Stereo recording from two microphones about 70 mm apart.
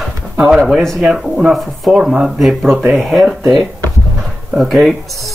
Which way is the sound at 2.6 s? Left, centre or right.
Right.